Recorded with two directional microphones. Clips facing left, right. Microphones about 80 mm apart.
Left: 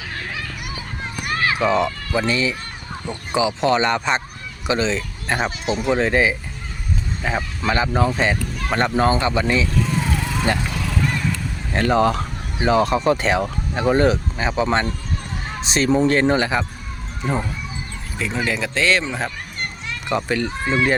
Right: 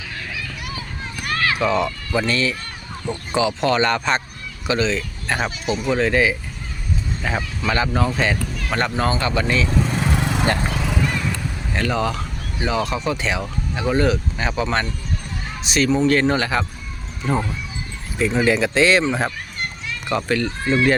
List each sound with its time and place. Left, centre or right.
0.1 s a sound: left
1.2 s run: left
2.1 s speech: centre
7.2 s speech: centre
7.7 s speech: centre
10.2 s lawn mower: right
10.6 s horse: right
10.9 s horse: centre
11.8 s speech: left
14.3 s speech: left
16.3 s speech: left
18.3 s speech: centre
20.1 s speech: centre